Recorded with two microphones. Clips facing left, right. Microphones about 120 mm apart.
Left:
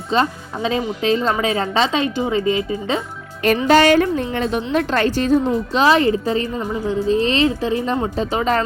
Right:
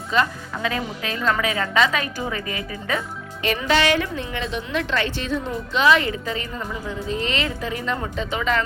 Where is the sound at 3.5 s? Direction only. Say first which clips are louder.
Left 7 dB; 45° left (ahead or behind).